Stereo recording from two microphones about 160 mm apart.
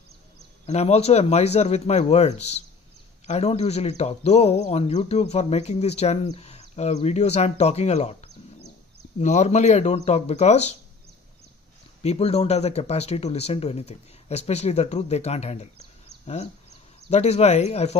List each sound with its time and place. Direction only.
0.7 s speech: 40° left (ahead or behind)
9.2 s speech: 45° left (ahead or behind)
12.0 s speech: 40° left (ahead or behind)
17.1 s speech: 40° left (ahead or behind)